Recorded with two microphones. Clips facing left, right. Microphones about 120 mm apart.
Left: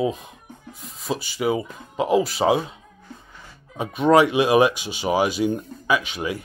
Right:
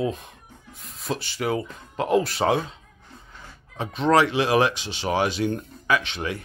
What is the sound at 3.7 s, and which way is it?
Speech, 10° left (ahead or behind).